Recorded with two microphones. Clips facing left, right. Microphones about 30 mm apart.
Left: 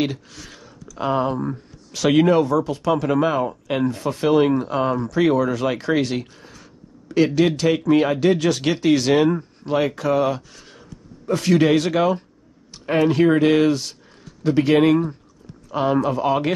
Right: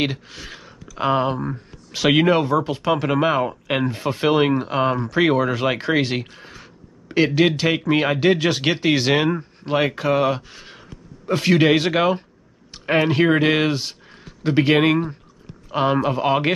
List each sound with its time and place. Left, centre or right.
0.0 s speech: right